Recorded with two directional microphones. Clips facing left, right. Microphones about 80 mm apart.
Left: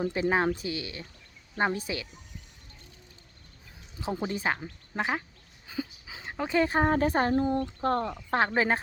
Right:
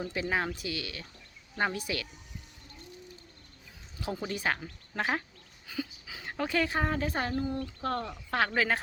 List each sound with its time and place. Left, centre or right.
0.0 s speech: left
4.0 s speech: left
4.5 s speech: centre
5.6 s a sound: left
6.5 s speech: left